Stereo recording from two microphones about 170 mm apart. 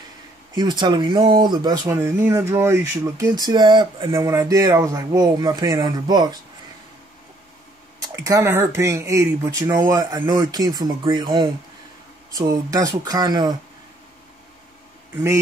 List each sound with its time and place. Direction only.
0.6 s speech: 25° right (ahead or behind)
8.0 s speech: 20° right (ahead or behind)
15.1 s speech: 15° right (ahead or behind)